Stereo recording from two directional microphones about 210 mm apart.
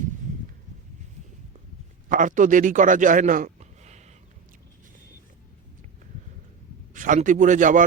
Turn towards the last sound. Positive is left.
turn(degrees=-35)  # may be behind; listen again after turning